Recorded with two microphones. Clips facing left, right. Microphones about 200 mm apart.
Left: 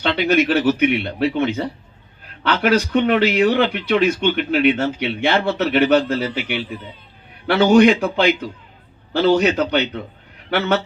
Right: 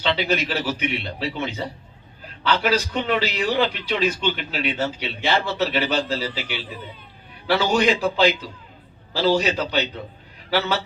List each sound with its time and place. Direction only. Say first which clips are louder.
0.0 s a man's voice: left 6 dB; 55° left (ahead or behind)